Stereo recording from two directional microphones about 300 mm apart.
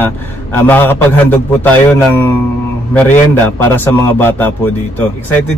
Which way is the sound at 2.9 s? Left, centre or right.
Centre.